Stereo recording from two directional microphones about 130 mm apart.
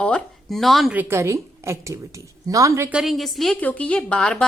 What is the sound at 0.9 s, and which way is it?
A woman's voice, 20° right (ahead or behind).